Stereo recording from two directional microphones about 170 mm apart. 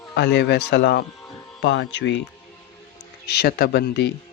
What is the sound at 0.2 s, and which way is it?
Speech, 80° left.